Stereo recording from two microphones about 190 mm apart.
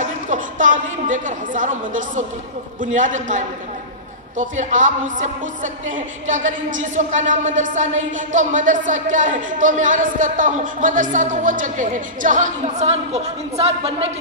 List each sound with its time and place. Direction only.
0.3 s a woman's voice: 45° right (ahead or behind)